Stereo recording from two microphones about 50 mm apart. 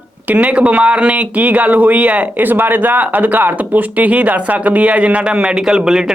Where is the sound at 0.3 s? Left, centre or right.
Right.